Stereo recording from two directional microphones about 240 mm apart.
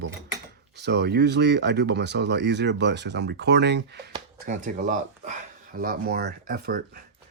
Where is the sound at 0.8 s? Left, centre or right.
Right.